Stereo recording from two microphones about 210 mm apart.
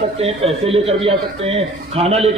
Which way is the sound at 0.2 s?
30° right (ahead or behind).